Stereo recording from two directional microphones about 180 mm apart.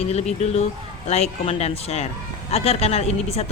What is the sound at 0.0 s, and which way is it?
Speech, 35° left (ahead or behind).